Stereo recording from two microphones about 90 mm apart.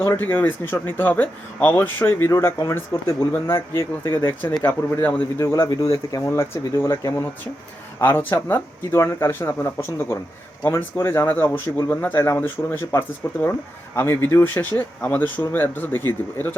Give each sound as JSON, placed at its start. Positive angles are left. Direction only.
{"t": 0.0, "sound": "speech", "side_deg": 25}
{"t": 5.6, "sound": "speech", "side_deg": 45}
{"t": 5.9, "sound": "speech", "side_deg": 35}